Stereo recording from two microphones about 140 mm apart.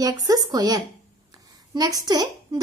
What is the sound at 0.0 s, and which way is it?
A woman's voice, 25° right (ahead or behind).